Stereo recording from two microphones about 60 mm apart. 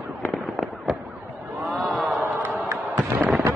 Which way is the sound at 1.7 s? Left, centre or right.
Centre.